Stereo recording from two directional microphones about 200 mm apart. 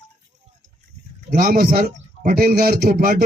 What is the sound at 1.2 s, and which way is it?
A man's voice, 45° right (ahead or behind).